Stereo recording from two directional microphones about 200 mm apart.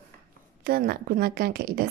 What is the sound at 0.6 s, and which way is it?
A woman's voice, 50° right (ahead or behind).